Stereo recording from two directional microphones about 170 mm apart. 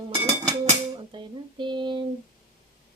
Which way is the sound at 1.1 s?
30° right (ahead or behind).